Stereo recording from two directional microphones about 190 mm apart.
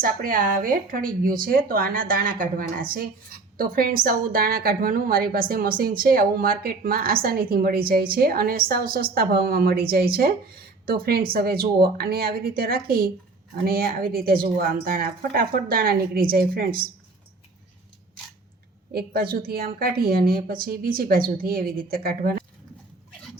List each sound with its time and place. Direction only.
0.0 s speech: 45° right (ahead or behind)
18.9 s speech: 50° right (ahead or behind)